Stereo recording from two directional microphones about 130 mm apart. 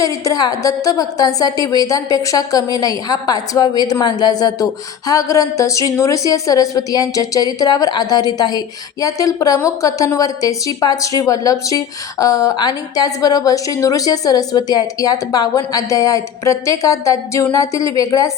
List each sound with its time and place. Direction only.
0.0 s a woman's voice: 30° left (ahead or behind)